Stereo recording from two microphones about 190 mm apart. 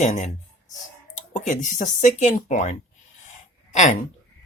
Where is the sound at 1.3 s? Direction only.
40° left (ahead or behind).